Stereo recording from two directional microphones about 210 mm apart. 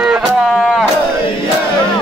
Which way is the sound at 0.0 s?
Centre (ahead or behind).